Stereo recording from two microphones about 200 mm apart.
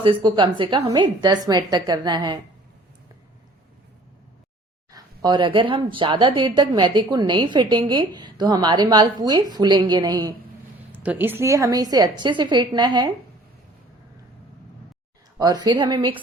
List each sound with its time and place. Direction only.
0.0 s a woman's voice: 25° right (ahead or behind)
4.9 s a woman's voice: 20° right (ahead or behind)
15.4 s a woman's voice: 20° right (ahead or behind)